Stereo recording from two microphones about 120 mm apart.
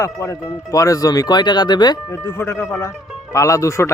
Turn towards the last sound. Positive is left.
turn(degrees=25)  # may be behind; listen again after turning